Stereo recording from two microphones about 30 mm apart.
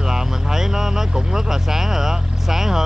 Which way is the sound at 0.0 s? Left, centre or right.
Centre.